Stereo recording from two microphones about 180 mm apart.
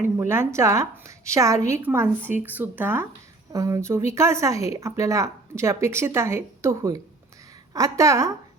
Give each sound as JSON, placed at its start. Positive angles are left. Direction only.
{"t": 0.0, "sound": "a woman's voice", "side_deg": -15}